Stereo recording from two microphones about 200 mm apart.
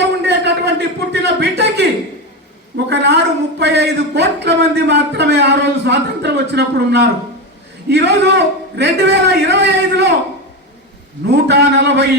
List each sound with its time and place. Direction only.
0.3 s a sound: 55° right (ahead or behind)
2.7 s speech: 60° right (ahead or behind)
11.3 s speech: 55° right (ahead or behind)